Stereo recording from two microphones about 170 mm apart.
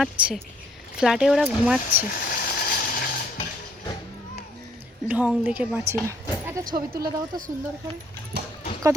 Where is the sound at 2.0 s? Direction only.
55° left (ahead or behind).